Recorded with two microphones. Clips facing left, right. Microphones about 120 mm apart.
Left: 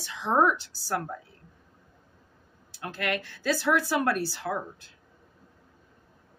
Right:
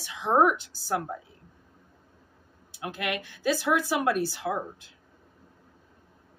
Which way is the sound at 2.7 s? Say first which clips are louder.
Left 1 dB; 15° right (ahead or behind).